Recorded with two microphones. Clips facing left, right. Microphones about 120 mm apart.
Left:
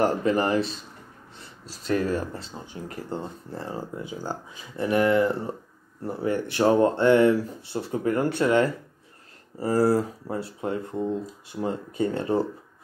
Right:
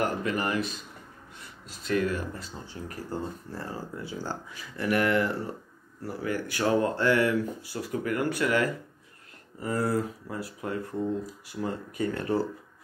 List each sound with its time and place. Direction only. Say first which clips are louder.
0.0 s speech: left 6 dB; 30° left (ahead or behind)